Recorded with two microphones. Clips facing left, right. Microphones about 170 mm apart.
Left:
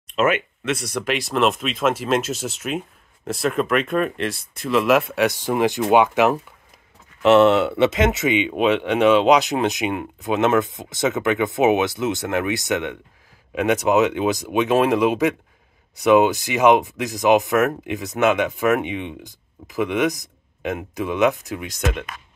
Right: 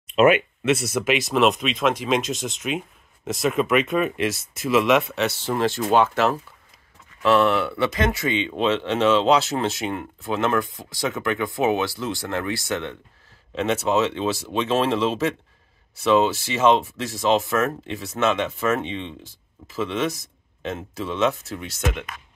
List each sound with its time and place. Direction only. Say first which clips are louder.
0.0 s speech: right 3 dB; 10° right (ahead or behind); by 21.8 s 15° left (ahead or behind)